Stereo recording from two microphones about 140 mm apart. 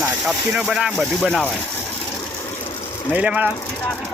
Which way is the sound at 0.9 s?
5° left (ahead or behind).